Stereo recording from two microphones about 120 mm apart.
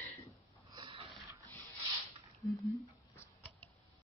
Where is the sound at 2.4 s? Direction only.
Centre (ahead or behind).